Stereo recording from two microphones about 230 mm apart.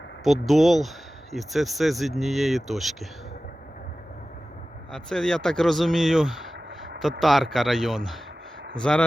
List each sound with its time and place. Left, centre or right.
0.3 s speech: centre
4.9 s speech: centre